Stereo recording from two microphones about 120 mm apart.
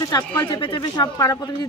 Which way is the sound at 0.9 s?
35° left (ahead or behind).